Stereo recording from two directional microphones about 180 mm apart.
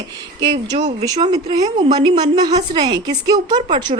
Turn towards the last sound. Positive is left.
turn(degrees=-25)  # may be behind; listen again after turning